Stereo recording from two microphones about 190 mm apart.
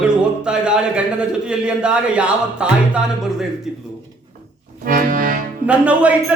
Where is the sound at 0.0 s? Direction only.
5° right (ahead or behind).